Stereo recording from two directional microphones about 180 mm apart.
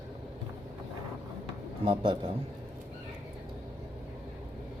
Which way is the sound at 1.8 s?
30° right (ahead or behind).